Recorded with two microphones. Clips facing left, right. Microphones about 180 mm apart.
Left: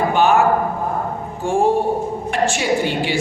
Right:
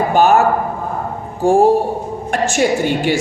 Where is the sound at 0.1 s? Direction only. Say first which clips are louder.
Right 4 dB; 40° right (ahead or behind).